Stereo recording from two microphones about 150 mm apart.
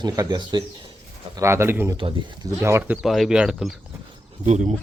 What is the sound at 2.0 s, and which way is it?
Speech, 35° right (ahead or behind).